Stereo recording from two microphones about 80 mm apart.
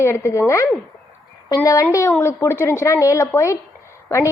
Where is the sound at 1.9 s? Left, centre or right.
Left.